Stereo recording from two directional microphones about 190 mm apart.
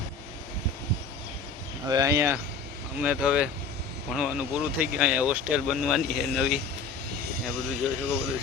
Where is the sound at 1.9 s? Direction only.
15° right (ahead or behind); by 6.6 s centre (ahead or behind).